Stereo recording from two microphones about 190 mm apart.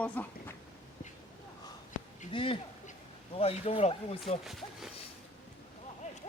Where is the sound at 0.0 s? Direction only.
10° left (ahead or behind).